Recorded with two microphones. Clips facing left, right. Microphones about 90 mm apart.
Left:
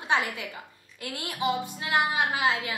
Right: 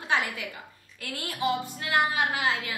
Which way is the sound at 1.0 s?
20° left (ahead or behind).